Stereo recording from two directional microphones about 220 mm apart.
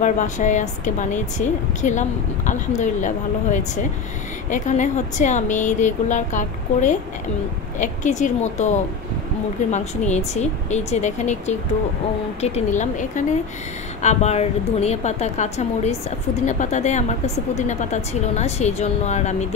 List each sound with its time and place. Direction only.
0.0 s a woman's voice: 35° left (ahead or behind)
4.5 s a woman's voice: 35° left (ahead or behind)